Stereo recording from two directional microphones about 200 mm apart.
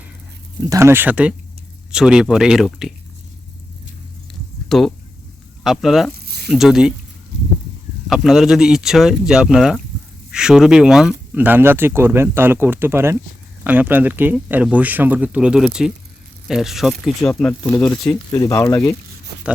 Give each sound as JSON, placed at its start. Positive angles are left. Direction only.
{"t": 0.7, "sound": "speech", "side_deg": -15}
{"t": 4.7, "sound": "speech", "side_deg": 0}
{"t": 6.1, "sound": "a sound", "side_deg": -55}
{"t": 6.5, "sound": "speech", "side_deg": 0}
{"t": 8.0, "sound": "speech", "side_deg": 0}